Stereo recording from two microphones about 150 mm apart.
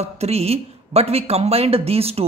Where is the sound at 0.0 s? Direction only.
45° right (ahead or behind).